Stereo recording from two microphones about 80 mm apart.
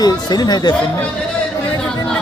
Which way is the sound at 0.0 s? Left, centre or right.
Left.